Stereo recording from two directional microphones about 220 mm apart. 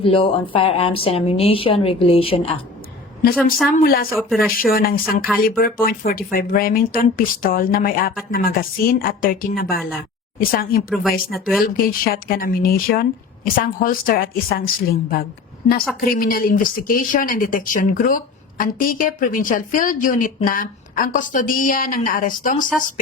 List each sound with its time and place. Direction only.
0.0 s a woman's voice: 25° left (ahead or behind)
3.8 s speech: 40° left (ahead or behind)
4.2 s speech: centre (ahead or behind)
4.6 s speech: 40° left (ahead or behind)
10.8 s speech: centre (ahead or behind)
11.6 s speech: 40° left (ahead or behind)